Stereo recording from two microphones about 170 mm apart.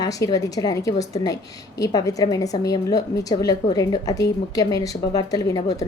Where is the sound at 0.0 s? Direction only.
20° left (ahead or behind).